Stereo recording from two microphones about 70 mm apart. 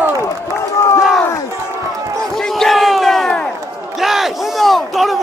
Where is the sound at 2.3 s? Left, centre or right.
Centre.